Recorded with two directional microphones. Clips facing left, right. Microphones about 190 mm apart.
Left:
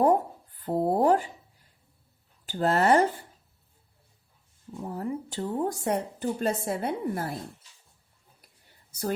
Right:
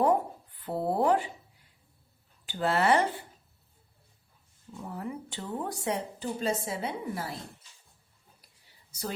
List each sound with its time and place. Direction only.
0.6 s speech: 40° left (ahead or behind)
2.5 s speech: 40° left (ahead or behind)
4.8 s speech: 40° left (ahead or behind)
8.4 s a sound: 50° left (ahead or behind)